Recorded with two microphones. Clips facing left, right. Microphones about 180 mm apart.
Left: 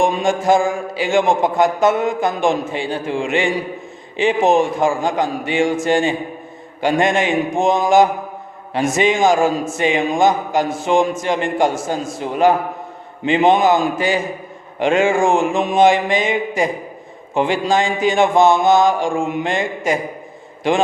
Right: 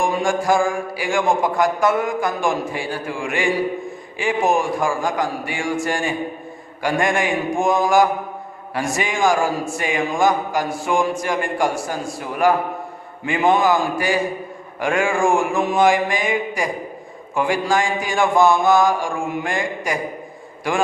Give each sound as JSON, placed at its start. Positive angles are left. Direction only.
{"t": 0.0, "sound": "a man's voice", "side_deg": 20}